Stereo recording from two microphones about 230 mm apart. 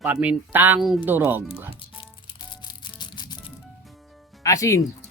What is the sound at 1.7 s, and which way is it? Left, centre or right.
Music, left.